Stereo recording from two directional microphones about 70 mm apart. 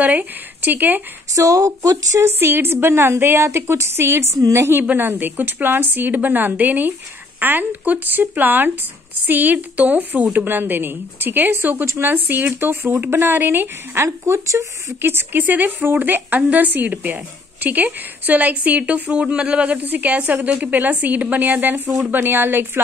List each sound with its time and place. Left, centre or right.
0.0 s speech: right
1.3 s speech: right
2.2 s a woman's voice: right
4.7 s speech: right
14.0 s speech: right
15.0 s a woman's voice: right